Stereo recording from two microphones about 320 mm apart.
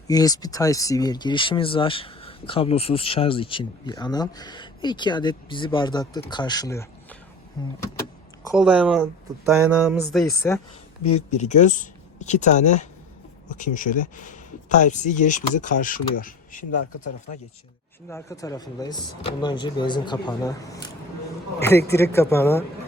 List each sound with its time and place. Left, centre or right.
0.1 s speech: centre
8.5 s speech: centre
11.3 s speech: left
18.1 s speech: centre
21.9 s speech: centre